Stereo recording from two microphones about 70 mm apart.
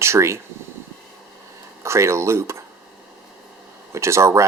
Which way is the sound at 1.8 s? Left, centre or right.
Right.